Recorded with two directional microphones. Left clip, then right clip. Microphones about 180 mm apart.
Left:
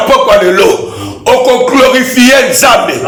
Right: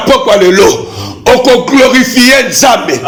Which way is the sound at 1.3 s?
30° right (ahead or behind).